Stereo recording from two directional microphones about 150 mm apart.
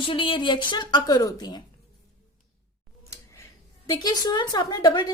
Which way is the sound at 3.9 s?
25° left (ahead or behind).